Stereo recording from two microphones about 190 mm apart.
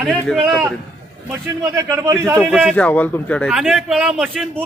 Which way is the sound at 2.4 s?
5° right (ahead or behind).